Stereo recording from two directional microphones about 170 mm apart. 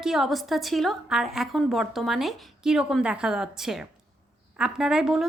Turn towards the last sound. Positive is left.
turn(degrees=-5)  # may be behind; listen again after turning